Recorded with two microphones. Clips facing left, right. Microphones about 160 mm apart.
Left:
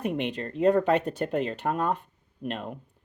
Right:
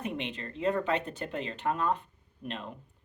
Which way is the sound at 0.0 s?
50° left (ahead or behind).